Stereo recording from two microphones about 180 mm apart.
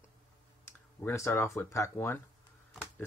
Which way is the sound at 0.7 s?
15° left (ahead or behind).